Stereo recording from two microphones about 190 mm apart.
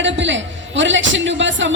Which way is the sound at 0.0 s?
75° right (ahead or behind).